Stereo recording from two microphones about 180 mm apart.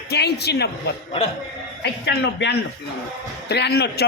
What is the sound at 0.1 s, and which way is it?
Speech, 65° left (ahead or behind).